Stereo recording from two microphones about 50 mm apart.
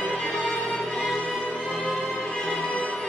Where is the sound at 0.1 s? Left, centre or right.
Centre.